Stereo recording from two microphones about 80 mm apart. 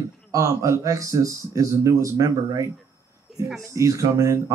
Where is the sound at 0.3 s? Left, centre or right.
Right.